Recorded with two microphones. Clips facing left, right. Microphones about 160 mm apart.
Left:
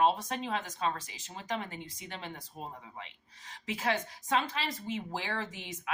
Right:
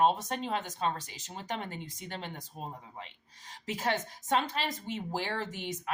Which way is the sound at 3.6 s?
40° right (ahead or behind).